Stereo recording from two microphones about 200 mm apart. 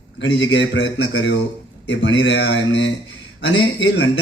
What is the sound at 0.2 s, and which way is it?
Speech, 65° left (ahead or behind).